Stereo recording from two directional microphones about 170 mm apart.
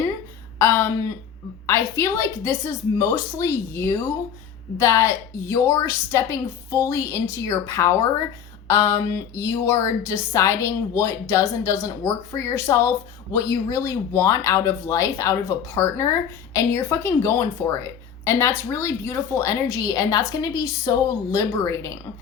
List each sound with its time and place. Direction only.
0.6 s a woman's voice: 15° left (ahead or behind)